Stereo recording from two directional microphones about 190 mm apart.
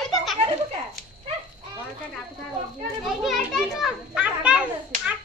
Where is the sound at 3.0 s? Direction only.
Centre (ahead or behind).